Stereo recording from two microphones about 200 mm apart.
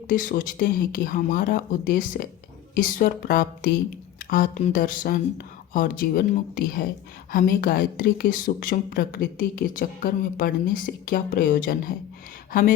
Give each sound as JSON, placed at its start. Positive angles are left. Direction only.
{"t": 0.1, "sound": "a woman's voice", "side_deg": 45}